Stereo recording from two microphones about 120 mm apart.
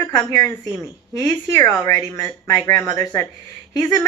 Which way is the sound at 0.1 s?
20° left (ahead or behind).